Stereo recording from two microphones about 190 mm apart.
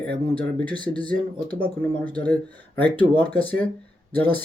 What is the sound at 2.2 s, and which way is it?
Speech, 5° left (ahead or behind).